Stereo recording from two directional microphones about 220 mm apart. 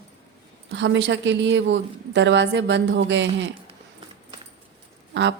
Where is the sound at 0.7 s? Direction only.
55° right (ahead or behind).